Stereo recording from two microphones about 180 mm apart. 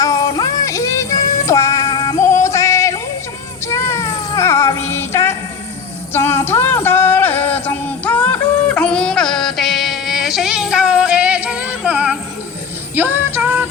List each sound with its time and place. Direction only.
0.0 s synthetic singing: 20° left (ahead or behind)
3.7 s cat: 15° left (ahead or behind)
6.1 s a sound: 15° left (ahead or behind); by 12.2 s 5° right (ahead or behind)
13.0 s music: 10° right (ahead or behind)